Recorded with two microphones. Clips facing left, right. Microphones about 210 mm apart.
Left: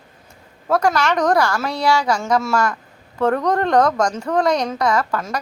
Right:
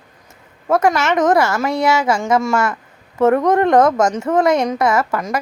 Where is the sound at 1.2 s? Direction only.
20° right (ahead or behind).